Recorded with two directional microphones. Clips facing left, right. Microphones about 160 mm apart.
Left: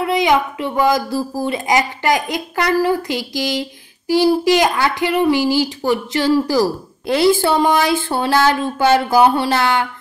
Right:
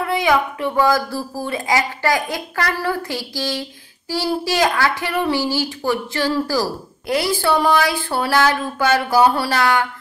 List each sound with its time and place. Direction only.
0.0 s a child's voice: 20° left (ahead or behind)